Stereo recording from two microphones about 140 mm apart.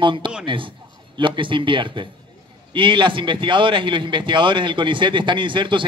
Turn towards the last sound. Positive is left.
turn(degrees=-35)  # may be behind; listen again after turning